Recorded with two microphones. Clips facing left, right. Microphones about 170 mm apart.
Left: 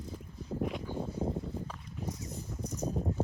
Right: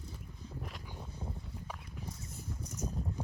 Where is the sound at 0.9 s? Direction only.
50° left (ahead or behind).